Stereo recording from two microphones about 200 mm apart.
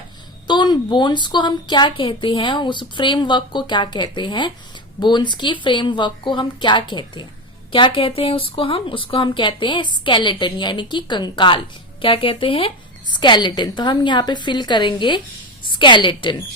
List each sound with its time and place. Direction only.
0.4 s a woman's voice: 20° left (ahead or behind)